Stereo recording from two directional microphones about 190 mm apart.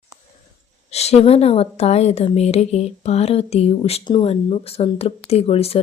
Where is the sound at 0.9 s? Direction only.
35° left (ahead or behind).